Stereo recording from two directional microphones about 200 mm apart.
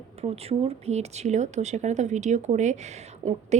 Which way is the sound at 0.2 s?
30° right (ahead or behind).